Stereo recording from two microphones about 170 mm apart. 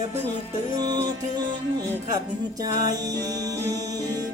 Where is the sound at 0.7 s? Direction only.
25° right (ahead or behind).